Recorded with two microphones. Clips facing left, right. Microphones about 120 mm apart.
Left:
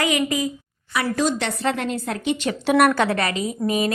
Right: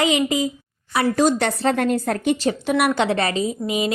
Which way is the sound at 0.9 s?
45° right (ahead or behind).